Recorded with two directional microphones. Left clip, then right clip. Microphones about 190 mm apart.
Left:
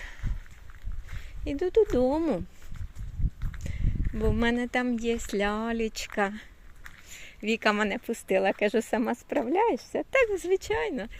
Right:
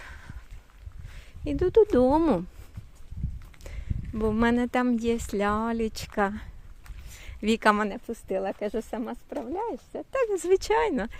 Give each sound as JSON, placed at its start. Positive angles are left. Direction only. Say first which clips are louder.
{"t": 1.5, "sound": "speech", "louder": "right 3 dB", "side_deg": -20}
{"t": 3.6, "sound": "speech", "louder": "left 3 dB", "side_deg": -15}
{"t": 8.0, "sound": "speech", "louder": "left 4 dB", "side_deg": 10}
{"t": 10.3, "sound": "speech", "louder": "right 4 dB", "side_deg": -20}